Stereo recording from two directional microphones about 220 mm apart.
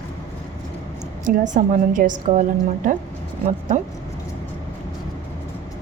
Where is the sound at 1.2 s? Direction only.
35° right (ahead or behind).